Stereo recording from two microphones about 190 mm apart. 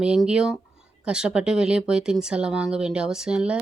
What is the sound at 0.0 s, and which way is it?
Speech, 5° right (ahead or behind).